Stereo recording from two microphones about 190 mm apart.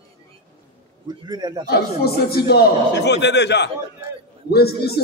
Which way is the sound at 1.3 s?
20° right (ahead or behind).